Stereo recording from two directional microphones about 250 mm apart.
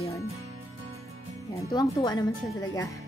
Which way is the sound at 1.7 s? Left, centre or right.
Centre.